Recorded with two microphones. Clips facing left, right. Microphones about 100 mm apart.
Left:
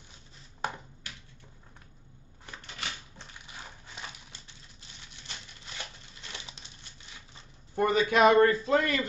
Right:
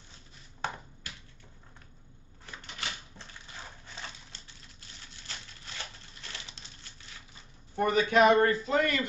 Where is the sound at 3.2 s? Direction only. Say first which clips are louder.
Even; 15° left (ahead or behind).